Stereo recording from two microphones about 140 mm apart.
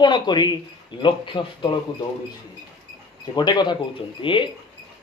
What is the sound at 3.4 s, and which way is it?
Speech, 30° left (ahead or behind).